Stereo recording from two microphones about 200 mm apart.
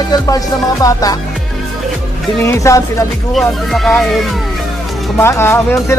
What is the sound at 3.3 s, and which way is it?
Speech, centre (ahead or behind).